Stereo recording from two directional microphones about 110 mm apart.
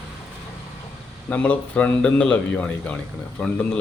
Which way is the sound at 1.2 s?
15° left (ahead or behind).